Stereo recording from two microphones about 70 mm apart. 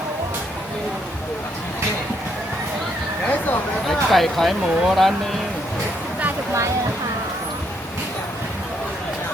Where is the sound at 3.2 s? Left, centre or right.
Left.